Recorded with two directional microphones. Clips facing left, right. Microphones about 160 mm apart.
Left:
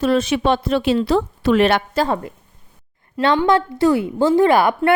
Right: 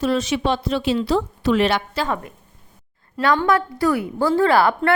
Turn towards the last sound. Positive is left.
turn(degrees=15)  # may be behind; listen again after turning